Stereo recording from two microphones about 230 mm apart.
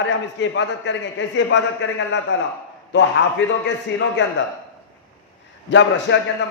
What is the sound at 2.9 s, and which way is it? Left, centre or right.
Speech, left.